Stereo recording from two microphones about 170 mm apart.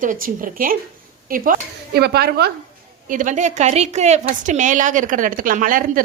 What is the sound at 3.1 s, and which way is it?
A woman's voice, 50° right (ahead or behind).